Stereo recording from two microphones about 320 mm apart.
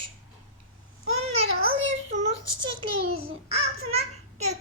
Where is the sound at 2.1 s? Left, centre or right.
Centre.